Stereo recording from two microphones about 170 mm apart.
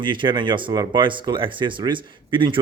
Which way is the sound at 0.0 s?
30° right (ahead or behind).